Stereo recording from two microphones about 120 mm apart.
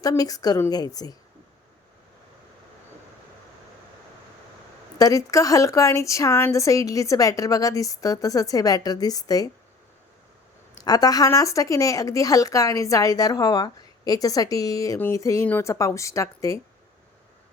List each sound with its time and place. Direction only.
0.0 s a woman's voice: 30° left (ahead or behind)
4.9 s a woman's voice: 30° left (ahead or behind)
10.8 s a woman's voice: 30° left (ahead or behind)